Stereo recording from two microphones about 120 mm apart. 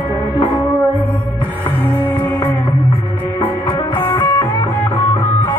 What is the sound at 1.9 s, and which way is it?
Music, 45° left (ahead or behind).